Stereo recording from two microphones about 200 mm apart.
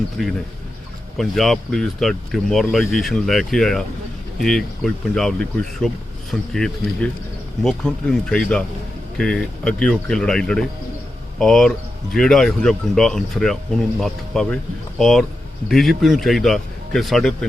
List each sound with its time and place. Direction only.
0.2 s speech: centre (ahead or behind)